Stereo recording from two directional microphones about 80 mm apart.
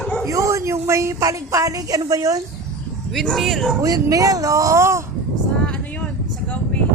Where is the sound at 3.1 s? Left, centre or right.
Centre.